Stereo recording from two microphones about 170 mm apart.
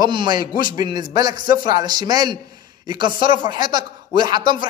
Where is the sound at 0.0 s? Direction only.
25° right (ahead or behind).